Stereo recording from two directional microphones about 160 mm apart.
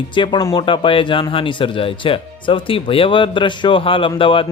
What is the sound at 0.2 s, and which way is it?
Speech, 30° left (ahead or behind).